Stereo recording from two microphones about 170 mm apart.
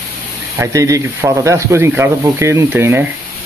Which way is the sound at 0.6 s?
20° right (ahead or behind).